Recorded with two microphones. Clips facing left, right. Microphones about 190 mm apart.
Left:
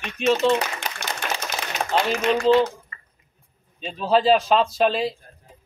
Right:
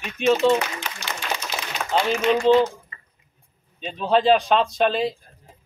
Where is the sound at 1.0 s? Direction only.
60° left (ahead or behind).